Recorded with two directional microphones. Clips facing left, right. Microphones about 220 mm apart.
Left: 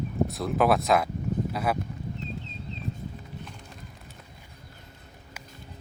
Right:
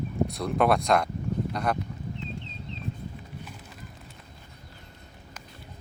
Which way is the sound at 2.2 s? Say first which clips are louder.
Left 1 dB; 40° left (ahead or behind).